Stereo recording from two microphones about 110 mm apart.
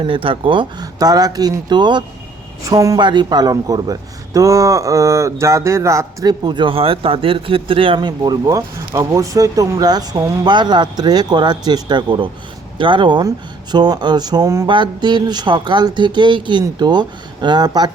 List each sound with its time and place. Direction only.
0.0 s speech: 50° right (ahead or behind)
0.9 s speech: 35° right (ahead or behind)
2.6 s speech: 30° right (ahead or behind)
3.0 s speech: 45° right (ahead or behind)